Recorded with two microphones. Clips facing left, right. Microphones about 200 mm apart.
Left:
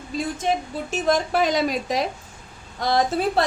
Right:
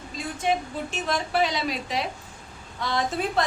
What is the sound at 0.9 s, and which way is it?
A woman's voice, 45° left (ahead or behind).